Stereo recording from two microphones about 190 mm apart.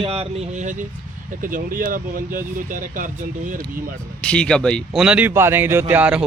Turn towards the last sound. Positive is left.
turn(degrees=-5)  # may be behind; listen again after turning